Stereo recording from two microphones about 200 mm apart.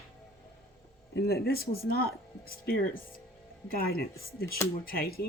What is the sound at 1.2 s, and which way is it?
Speech, 50° left (ahead or behind).